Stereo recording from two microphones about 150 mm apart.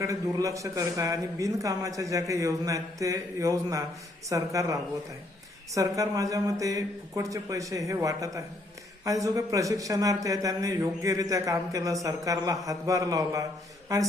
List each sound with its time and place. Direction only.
0.0 s a man's voice: 20° right (ahead or behind)